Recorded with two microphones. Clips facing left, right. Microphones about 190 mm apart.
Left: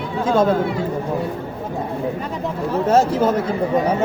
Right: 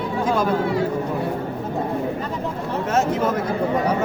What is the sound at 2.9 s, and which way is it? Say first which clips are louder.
Speech: left 4 dB; 30° left (ahead or behind).